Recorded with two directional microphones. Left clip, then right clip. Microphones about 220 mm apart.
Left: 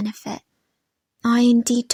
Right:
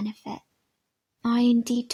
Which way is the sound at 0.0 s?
35° left (ahead or behind).